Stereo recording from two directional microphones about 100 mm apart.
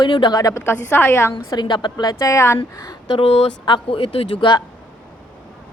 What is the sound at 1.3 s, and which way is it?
A woman's voice, 50° left (ahead or behind).